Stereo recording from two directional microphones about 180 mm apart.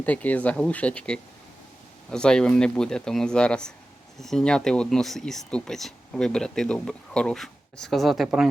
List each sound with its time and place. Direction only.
0.0 s speech: 10° left (ahead or behind)